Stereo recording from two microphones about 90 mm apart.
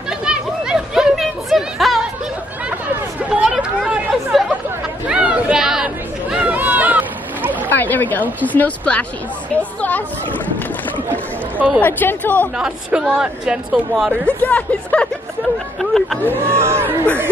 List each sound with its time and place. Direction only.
0.2 s chatter: 5° right (ahead or behind)
3.4 s chatter: 10° right (ahead or behind)
5.0 s chatter: 15° right (ahead or behind)
6.3 s a sound: 15° right (ahead or behind)
7.7 s a woman's voice: 20° left (ahead or behind)
11.1 s speech: 20° right (ahead or behind)
11.8 s a woman's voice: 20° left (ahead or behind)
12.5 s speech: 10° right (ahead or behind)
14.4 s speech: 15° left (ahead or behind)
15.8 s speech: centre (ahead or behind)
16.3 s speech: 25° right (ahead or behind)